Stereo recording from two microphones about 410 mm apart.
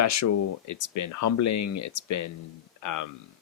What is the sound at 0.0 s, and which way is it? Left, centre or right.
Speech, left.